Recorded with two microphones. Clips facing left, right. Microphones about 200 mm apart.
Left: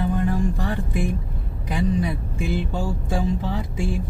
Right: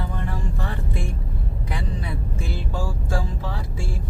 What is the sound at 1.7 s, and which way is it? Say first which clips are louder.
Vehicle: left 9 dB; 15° left (ahead or behind).